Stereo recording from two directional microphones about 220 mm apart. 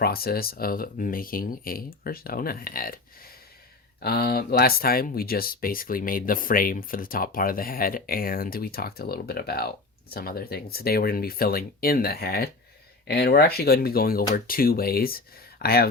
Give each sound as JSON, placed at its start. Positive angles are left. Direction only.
{"t": 0.0, "sound": "speech", "side_deg": 45}